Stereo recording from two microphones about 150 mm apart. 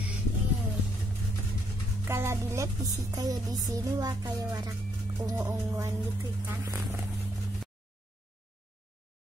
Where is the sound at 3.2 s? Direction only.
25° right (ahead or behind).